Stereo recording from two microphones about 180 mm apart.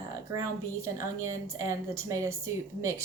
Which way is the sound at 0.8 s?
15° right (ahead or behind).